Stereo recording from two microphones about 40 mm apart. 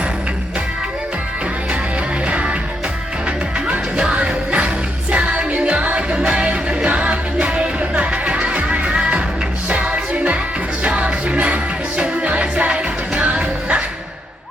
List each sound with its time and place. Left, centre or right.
2.2 s music: right